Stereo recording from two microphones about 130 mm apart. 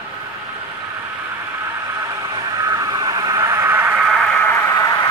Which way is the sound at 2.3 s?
25° right (ahead or behind).